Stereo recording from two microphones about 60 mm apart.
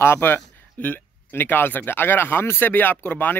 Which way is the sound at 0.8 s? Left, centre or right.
Left.